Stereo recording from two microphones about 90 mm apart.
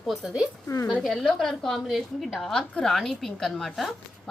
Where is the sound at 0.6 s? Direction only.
30° left (ahead or behind).